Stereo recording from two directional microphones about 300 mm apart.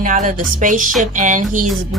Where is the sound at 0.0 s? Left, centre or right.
Right.